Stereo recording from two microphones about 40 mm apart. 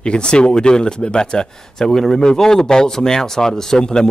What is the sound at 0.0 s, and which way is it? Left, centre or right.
Speech, left.